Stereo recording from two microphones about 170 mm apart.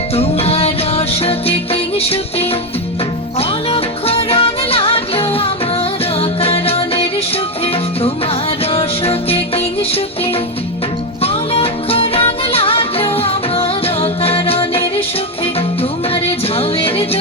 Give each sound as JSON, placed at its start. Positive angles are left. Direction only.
{"t": 0.2, "sound": "music", "side_deg": 35}
{"t": 3.7, "sound": "music", "side_deg": 35}
{"t": 8.7, "sound": "music", "side_deg": 35}
{"t": 11.2, "sound": "music", "side_deg": 35}
{"t": 16.6, "sound": "music", "side_deg": 35}